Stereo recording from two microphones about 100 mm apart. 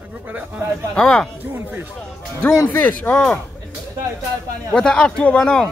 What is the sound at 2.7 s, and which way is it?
Speech, 20° left (ahead or behind).